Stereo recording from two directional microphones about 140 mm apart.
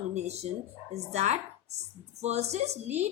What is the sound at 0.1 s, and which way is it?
Speech, 50° right (ahead or behind).